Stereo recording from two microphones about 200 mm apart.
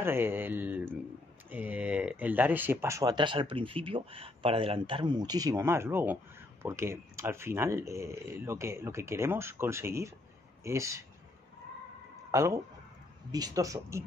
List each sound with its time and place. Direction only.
0.0 s speech: 10° right (ahead or behind)
12.3 s speech: 15° right (ahead or behind)